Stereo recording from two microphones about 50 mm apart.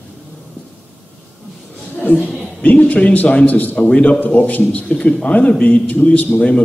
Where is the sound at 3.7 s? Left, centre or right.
Left.